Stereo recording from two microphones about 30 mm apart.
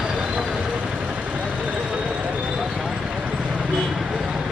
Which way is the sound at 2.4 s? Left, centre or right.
Right.